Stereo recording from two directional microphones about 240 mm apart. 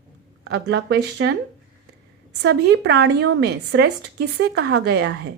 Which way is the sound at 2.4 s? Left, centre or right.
Right.